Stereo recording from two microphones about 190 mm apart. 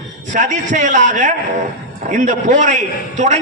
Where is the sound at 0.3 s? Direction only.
40° right (ahead or behind).